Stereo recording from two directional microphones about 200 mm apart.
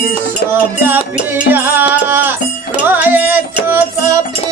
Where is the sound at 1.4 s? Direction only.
10° right (ahead or behind).